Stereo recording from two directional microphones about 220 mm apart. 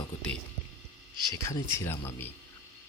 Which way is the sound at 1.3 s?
15° left (ahead or behind).